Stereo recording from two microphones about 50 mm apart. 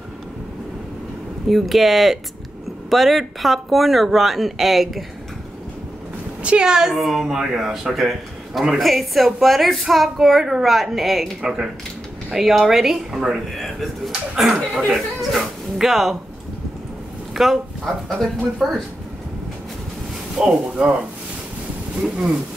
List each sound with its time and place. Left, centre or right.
1.5 s a woman's voice: centre
6.6 s a woman's voice: centre
11.4 s speech: centre
12.4 s speech: centre
13.6 s a woman's voice: centre
14.3 s speech: centre
17.3 s speech: centre
18.0 s speech: centre
20.3 s speech: right